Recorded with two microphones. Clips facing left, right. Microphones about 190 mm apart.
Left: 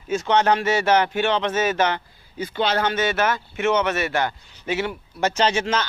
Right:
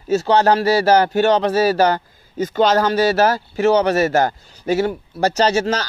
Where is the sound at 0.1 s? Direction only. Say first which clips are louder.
Right 5 dB; 35° right (ahead or behind).